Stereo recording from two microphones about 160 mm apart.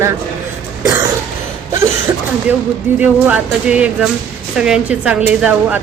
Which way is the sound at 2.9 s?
10° right (ahead or behind).